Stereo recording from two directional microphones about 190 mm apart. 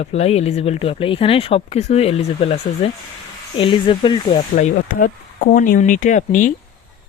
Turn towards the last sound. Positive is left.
turn(degrees=40)  # may be behind; listen again after turning